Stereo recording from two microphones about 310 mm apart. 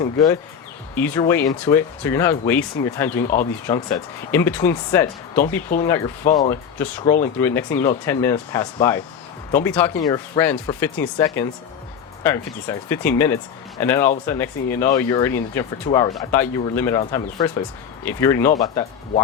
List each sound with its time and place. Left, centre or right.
0.0 s speech: centre
6.2 s speech: left
6.5 s speech: centre
12.2 s speech: centre